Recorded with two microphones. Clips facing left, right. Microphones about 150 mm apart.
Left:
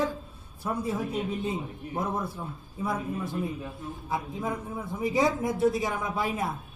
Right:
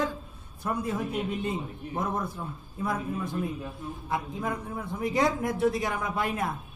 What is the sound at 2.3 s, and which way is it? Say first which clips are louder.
A man's voice: even; 25° left (ahead or behind).